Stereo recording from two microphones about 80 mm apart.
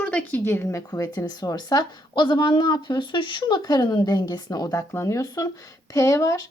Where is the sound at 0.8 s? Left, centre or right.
Left.